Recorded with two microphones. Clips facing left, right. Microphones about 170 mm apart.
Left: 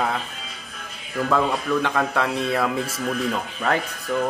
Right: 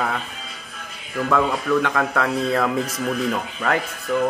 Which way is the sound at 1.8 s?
25° left (ahead or behind).